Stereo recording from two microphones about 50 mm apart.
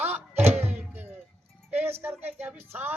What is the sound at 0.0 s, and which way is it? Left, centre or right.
Music, right.